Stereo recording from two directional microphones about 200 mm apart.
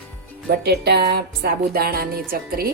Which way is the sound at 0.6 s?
55° right (ahead or behind).